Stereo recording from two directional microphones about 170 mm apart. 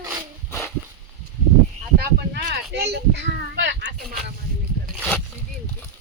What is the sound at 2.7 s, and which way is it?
A child's voice, 85° right.